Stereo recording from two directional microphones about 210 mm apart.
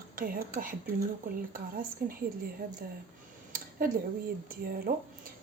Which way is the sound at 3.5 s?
45° right (ahead or behind).